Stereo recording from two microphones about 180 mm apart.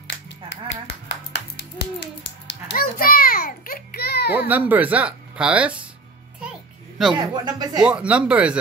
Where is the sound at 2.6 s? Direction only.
55° left (ahead or behind).